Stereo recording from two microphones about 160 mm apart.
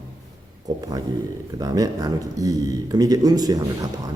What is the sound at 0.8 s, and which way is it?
A man's voice, 25° right (ahead or behind).